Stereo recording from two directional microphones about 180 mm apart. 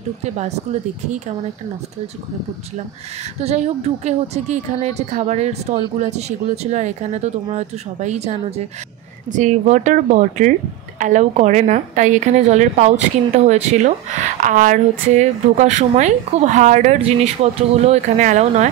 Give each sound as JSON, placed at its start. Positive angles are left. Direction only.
{"t": 0.2, "sound": "a woman's voice", "side_deg": -40}
{"t": 3.3, "sound": "a woman's voice", "side_deg": -35}